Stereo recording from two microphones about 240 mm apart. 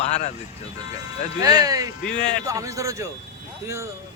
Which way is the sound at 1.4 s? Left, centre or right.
Centre.